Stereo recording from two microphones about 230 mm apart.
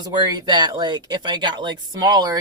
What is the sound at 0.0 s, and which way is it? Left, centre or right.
A woman's voice, centre.